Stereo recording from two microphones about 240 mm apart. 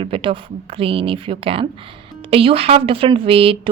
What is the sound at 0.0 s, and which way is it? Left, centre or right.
Speech, right.